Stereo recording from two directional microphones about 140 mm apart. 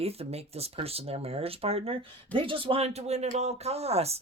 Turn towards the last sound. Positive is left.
turn(degrees=-45)  # may be behind; listen again after turning